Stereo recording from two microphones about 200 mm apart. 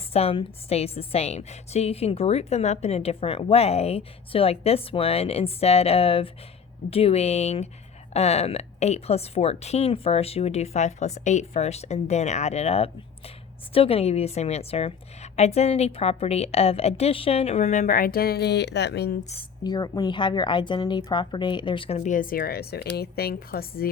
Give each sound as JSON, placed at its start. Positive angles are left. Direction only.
{"t": 0.1, "sound": "a woman's voice", "side_deg": 30}
{"t": 19.2, "sound": "a woman's voice", "side_deg": 30}
{"t": 19.6, "sound": "speech", "side_deg": 20}